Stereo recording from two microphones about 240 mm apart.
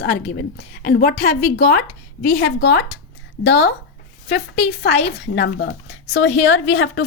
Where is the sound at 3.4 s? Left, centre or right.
Left.